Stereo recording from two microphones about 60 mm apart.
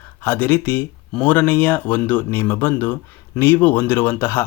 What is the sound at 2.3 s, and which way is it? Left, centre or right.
Speech, left.